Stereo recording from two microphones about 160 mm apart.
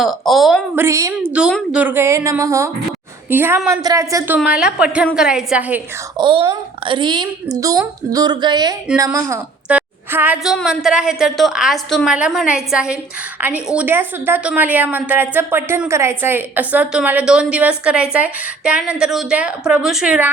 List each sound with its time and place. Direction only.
0.0 s a woman's voice: centre (ahead or behind)
0.8 s a woman's voice: 20° right (ahead or behind)
1.3 s a woman's voice: 5° right (ahead or behind)
4.4 s a woman's voice: 5° right (ahead or behind)
6.1 s a woman's voice: 30° right (ahead or behind)
9.6 s a sound: 10° right (ahead or behind)
10.4 s a woman's voice: centre (ahead or behind)